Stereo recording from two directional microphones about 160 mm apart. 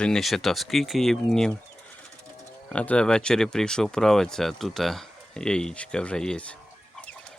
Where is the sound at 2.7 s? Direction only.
5° left (ahead or behind).